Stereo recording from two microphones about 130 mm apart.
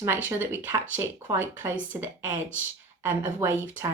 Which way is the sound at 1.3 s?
15° right (ahead or behind).